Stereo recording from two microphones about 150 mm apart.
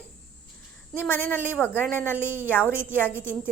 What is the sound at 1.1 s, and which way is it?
Speech, 15° left (ahead or behind).